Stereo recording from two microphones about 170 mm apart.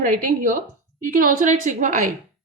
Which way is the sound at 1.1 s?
50° right (ahead or behind).